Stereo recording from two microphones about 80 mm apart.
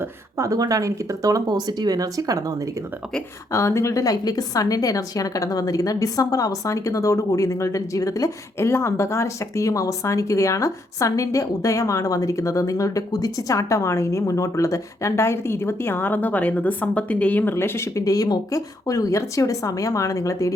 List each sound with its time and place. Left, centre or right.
0.3 s speech: right
3.5 s a woman's voice: left
8.5 s speech: left
17.5 s a woman's voice: left